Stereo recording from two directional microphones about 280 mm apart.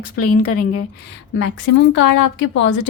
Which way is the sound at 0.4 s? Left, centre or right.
Left.